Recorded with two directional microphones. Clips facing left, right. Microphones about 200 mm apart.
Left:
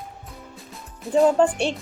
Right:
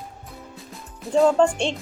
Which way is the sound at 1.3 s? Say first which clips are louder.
Even; 5° left (ahead or behind).